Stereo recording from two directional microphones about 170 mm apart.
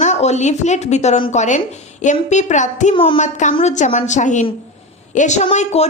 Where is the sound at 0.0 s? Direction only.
40° left (ahead or behind).